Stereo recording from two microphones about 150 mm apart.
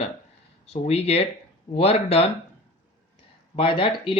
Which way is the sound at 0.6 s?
45° left (ahead or behind).